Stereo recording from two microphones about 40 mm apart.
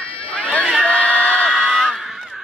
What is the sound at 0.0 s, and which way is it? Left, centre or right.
Crowd, left.